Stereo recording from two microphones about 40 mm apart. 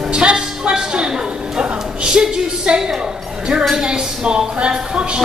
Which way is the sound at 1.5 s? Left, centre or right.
Centre.